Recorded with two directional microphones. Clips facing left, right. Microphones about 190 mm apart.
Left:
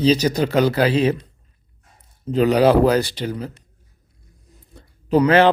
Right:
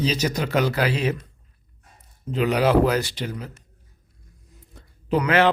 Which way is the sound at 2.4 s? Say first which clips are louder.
Left 5 dB; 35° left (ahead or behind).